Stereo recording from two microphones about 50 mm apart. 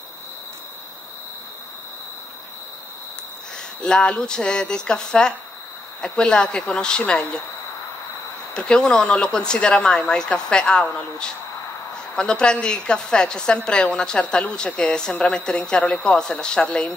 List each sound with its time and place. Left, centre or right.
3.8 s speech: centre
8.5 s speech: centre